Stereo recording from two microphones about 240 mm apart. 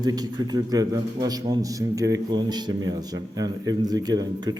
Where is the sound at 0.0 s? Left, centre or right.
Centre.